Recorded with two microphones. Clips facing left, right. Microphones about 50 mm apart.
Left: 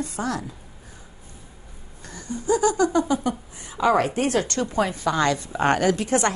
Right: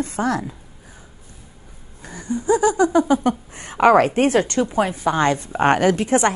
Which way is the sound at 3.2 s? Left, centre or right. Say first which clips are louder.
Right 6 dB; right.